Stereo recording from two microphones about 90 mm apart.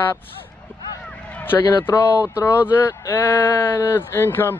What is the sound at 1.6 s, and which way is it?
Speech, 35° left (ahead or behind).